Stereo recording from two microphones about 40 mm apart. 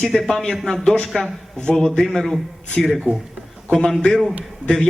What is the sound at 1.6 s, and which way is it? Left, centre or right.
Speech, centre.